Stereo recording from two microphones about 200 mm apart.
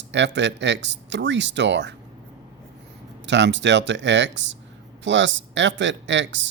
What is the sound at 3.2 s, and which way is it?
Speech, 60° right (ahead or behind).